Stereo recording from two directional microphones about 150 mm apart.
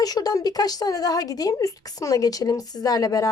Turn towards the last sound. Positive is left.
turn(degrees=25)  # may be behind; listen again after turning